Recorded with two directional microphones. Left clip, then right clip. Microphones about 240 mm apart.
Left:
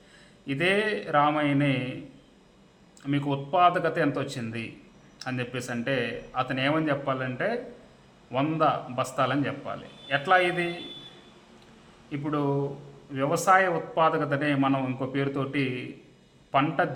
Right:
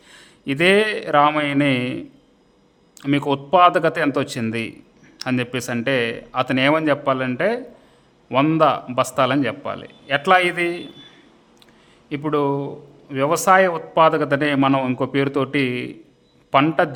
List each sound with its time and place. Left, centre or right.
0.1 s a man's voice: right
3.0 s a man's voice: right
12.1 s a man's voice: right